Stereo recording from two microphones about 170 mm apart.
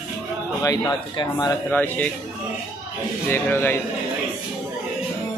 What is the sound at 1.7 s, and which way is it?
Speech, 10° left (ahead or behind).